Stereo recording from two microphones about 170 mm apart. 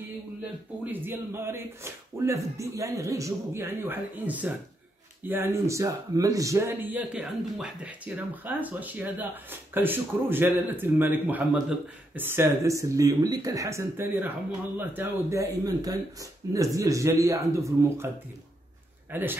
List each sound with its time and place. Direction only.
1.0 s speech: 15° right (ahead or behind)
19.1 s speech: 10° right (ahead or behind)